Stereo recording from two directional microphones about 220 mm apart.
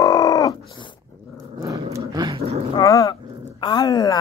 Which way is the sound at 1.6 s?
15° right (ahead or behind).